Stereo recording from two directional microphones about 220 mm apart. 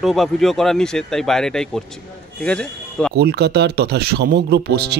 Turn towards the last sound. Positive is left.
turn(degrees=-45)  # may be behind; listen again after turning